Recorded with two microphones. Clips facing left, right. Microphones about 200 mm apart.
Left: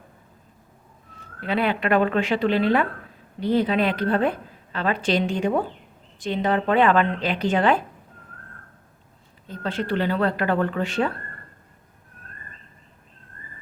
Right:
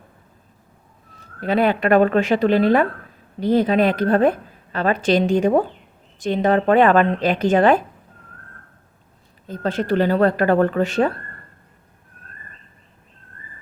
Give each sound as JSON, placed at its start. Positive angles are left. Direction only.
{"t": 1.4, "sound": "a woman's voice", "side_deg": -45}
{"t": 9.5, "sound": "a woman's voice", "side_deg": -45}